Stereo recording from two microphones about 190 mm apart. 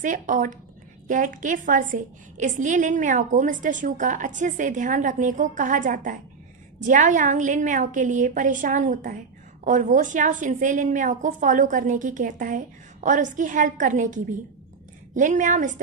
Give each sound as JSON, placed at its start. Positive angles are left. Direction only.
{"t": 0.0, "sound": "a woman's voice", "side_deg": -45}